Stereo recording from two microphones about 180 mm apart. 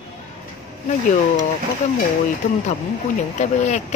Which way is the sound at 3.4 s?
40° left (ahead or behind).